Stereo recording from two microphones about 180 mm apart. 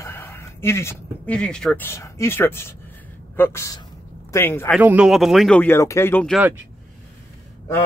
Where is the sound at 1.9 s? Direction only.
15° left (ahead or behind).